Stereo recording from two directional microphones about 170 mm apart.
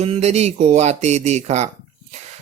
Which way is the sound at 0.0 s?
40° right (ahead or behind).